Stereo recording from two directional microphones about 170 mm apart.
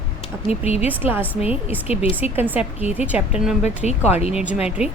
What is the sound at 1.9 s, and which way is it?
Speech, 35° left (ahead or behind).